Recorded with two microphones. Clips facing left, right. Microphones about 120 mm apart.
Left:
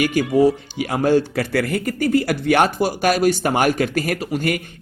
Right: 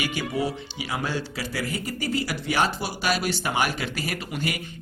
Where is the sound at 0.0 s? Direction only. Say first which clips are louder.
Left 11 dB; 45° left (ahead or behind).